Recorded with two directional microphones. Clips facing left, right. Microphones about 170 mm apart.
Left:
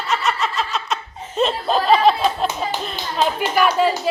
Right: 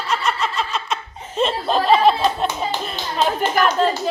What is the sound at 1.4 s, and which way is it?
Snicker, centre (ahead or behind).